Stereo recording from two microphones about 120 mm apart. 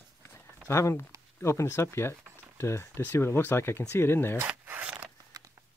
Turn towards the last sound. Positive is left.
turn(degrees=-15)  # may be behind; listen again after turning